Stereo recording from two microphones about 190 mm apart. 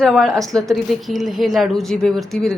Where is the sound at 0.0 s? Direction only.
Centre (ahead or behind).